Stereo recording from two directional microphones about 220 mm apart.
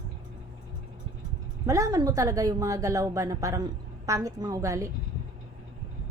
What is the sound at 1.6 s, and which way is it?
A woman's voice, 15° right (ahead or behind).